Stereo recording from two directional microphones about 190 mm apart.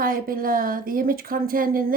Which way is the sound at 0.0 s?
50° right (ahead or behind).